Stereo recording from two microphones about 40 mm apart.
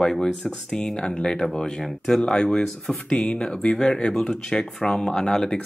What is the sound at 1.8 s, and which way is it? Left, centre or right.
Speech, centre.